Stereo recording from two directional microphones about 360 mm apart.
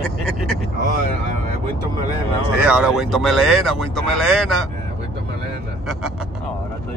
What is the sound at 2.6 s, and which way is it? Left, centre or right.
Speech, centre.